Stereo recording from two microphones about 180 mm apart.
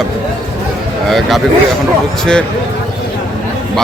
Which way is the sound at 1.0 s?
Centre (ahead or behind).